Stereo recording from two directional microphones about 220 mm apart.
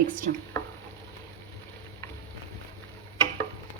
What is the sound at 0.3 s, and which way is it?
Speech, 40° right (ahead or behind).